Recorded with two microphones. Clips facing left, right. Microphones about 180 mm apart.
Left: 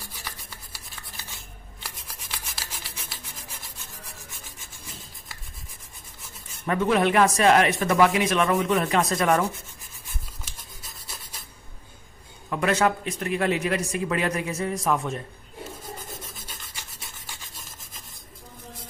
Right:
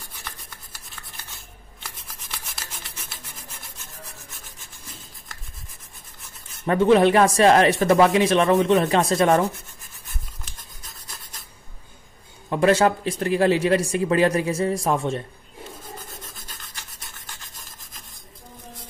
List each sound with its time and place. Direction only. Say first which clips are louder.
0.2 s filing: even; centre (ahead or behind)
1.8 s rub: even; centre (ahead or behind)
6.6 s speech: right 6 dB; 30° right (ahead or behind)
12.4 s speech: right 5 dB; 30° right (ahead or behind)
17.3 s rub: even; centre (ahead or behind)